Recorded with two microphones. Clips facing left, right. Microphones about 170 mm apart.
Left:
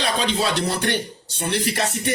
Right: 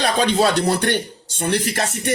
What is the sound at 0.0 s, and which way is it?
A man's voice, 50° right (ahead or behind).